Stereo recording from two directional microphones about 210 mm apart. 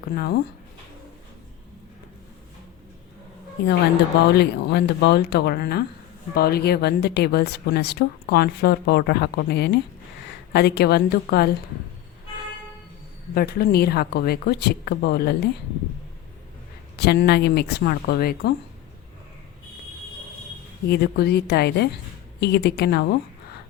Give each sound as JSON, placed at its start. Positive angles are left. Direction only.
{"t": 0.1, "sound": "speech", "side_deg": 50}
{"t": 3.6, "sound": "speech", "side_deg": 55}
{"t": 13.3, "sound": "speech", "side_deg": 45}
{"t": 17.0, "sound": "speech", "side_deg": 50}
{"t": 20.8, "sound": "speech", "side_deg": 50}